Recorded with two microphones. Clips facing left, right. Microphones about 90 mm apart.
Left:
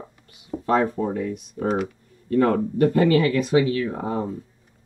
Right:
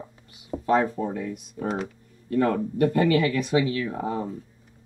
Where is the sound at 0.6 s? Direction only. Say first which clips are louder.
Left 1 dB; 35° left (ahead or behind).